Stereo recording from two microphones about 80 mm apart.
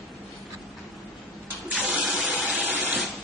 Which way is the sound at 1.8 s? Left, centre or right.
Centre.